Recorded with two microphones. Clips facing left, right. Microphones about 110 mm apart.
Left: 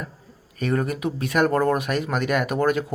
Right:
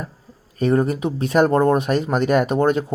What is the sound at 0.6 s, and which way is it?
Speech, 30° right (ahead or behind).